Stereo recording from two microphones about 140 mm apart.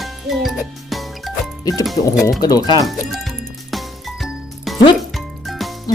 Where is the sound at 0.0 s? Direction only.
Centre (ahead or behind).